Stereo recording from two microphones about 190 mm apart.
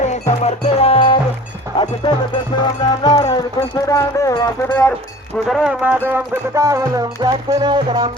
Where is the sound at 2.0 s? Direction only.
25° left (ahead or behind).